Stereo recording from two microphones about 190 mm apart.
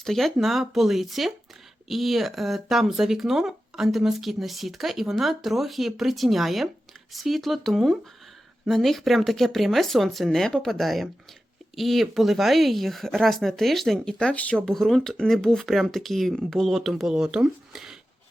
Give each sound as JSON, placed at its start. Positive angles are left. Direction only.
{"t": 0.0, "sound": "speech", "side_deg": 0}